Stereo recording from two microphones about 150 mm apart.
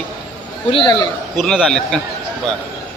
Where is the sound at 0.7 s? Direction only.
35° left (ahead or behind).